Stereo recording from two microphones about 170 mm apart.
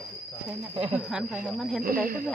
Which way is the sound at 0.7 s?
35° right (ahead or behind).